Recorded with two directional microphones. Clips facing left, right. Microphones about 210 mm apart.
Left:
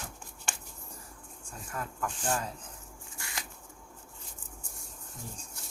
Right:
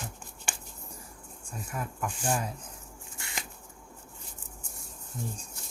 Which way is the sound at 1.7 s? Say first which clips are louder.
Right 1 dB; 10° right (ahead or behind).